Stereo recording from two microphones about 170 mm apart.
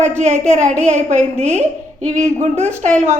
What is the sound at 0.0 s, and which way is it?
A woman's voice, 45° right (ahead or behind).